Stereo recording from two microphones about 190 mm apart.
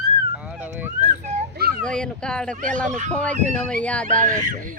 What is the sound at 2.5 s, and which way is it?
Speech, 40° right (ahead or behind).